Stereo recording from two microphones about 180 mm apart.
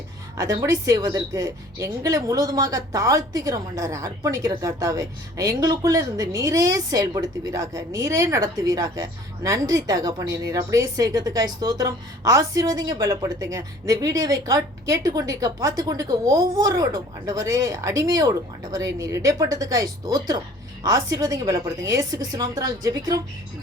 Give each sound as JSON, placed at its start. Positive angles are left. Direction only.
{"t": 0.3, "sound": "a woman's voice", "side_deg": -15}